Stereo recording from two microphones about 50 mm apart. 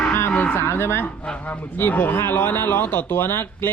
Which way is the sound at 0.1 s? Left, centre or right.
Left.